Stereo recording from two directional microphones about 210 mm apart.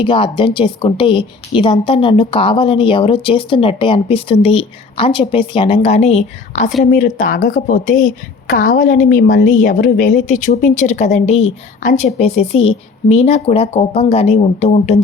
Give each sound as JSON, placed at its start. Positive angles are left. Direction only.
{"t": 0.0, "sound": "a woman's voice", "side_deg": 25}